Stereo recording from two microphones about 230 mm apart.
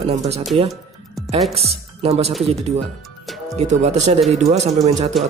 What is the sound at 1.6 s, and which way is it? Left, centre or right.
Speech, right.